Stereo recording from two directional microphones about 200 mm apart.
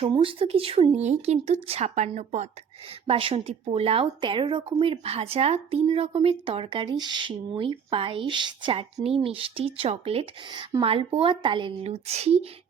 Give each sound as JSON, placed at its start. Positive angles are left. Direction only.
{"t": 0.0, "sound": "speech", "side_deg": -25}